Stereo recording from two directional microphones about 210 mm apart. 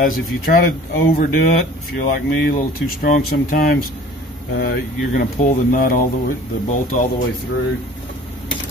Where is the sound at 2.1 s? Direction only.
40° left (ahead or behind).